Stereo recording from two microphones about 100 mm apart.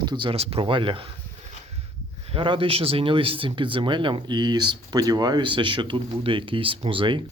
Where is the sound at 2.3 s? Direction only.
60° right (ahead or behind).